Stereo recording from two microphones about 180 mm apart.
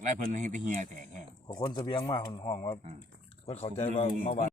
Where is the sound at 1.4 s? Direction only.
25° left (ahead or behind).